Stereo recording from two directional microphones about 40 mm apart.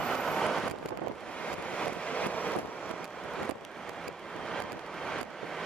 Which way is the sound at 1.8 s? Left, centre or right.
Left.